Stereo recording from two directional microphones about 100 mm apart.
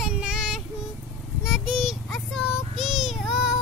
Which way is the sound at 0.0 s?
10° right (ahead or behind).